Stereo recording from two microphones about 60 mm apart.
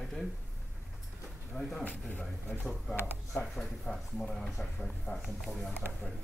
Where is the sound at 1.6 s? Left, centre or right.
Centre.